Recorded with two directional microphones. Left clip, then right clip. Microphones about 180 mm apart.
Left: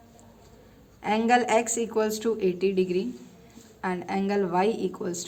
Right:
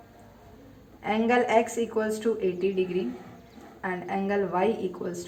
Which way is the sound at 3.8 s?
40° left (ahead or behind).